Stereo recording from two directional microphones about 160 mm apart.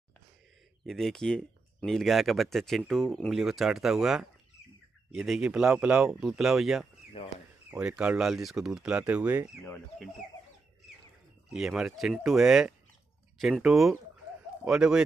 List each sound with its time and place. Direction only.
0.8 s speech: centre (ahead or behind)
7.2 s speech: 35° left (ahead or behind)
7.7 s speech: 5° right (ahead or behind)
11.5 s speech: 5° right (ahead or behind)